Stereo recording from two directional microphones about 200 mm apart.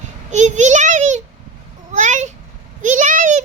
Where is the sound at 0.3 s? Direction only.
35° right (ahead or behind).